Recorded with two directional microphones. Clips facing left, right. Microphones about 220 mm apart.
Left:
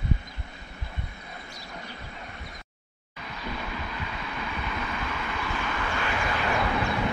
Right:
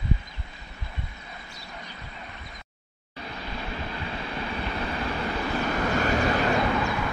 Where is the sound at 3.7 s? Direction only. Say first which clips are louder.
Right 2 dB; 30° right (ahead or behind).